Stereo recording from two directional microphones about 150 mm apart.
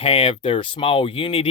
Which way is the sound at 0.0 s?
40° left (ahead or behind).